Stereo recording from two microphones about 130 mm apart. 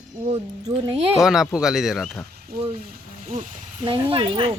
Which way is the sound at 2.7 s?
85° right.